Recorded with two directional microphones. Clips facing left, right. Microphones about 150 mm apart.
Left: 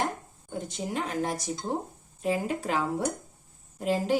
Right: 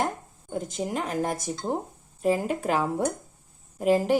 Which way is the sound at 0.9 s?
50° right (ahead or behind).